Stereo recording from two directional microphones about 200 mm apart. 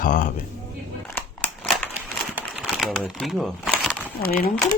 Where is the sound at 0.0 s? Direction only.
40° left (ahead or behind).